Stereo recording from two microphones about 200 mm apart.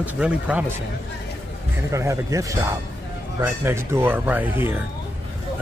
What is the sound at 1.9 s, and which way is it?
Speech, 15° right (ahead or behind).